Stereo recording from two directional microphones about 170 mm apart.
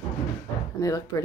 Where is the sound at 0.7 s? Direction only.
20° left (ahead or behind).